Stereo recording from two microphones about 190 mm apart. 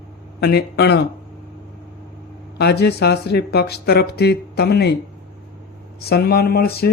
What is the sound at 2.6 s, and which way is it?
Speech, 60° left (ahead or behind).